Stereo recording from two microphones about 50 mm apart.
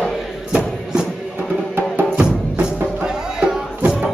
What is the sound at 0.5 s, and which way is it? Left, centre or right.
Music, centre.